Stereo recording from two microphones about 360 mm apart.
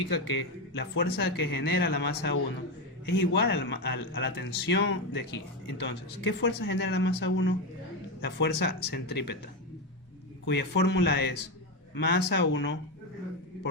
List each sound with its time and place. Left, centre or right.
0.1 s speech: left
10.4 s speech: left